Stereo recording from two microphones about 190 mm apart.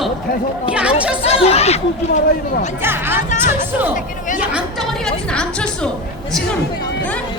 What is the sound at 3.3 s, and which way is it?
Speech, 40° left (ahead or behind).